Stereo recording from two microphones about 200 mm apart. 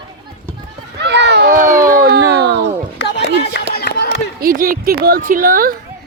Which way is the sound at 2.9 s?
60° left (ahead or behind).